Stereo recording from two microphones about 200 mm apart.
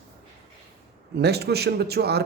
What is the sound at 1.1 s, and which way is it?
Speech, 55° right (ahead or behind).